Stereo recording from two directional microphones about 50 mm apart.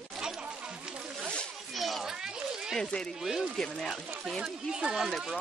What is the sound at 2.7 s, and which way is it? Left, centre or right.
Speech, centre.